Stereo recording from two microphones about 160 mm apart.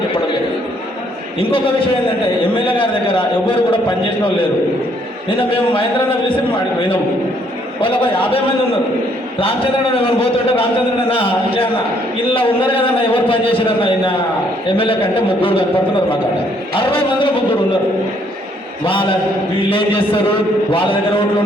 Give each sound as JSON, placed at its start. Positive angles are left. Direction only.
{"t": 1.4, "sound": "a man's voice", "side_deg": 35}
{"t": 2.6, "sound": "a man's voice", "side_deg": 30}
{"t": 5.4, "sound": "a man's voice", "side_deg": 35}
{"t": 7.8, "sound": "a man's voice", "side_deg": 35}
{"t": 9.9, "sound": "a man's voice", "side_deg": 35}
{"t": 16.8, "sound": "a man's voice", "side_deg": 35}
{"t": 19.7, "sound": "a man's voice", "side_deg": 35}